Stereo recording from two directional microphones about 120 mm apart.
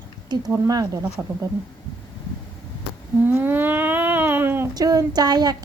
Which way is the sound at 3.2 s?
15° right (ahead or behind).